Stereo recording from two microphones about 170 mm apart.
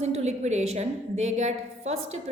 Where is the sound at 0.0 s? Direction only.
40° right (ahead or behind).